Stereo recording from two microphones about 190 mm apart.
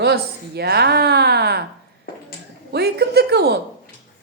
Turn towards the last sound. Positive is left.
turn(degrees=-60)  # may be behind; listen again after turning